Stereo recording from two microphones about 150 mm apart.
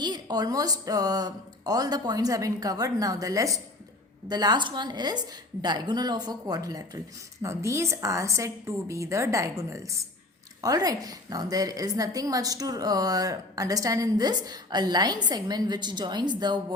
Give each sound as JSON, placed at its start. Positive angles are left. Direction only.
{"t": 0.0, "sound": "a woman's voice", "side_deg": -25}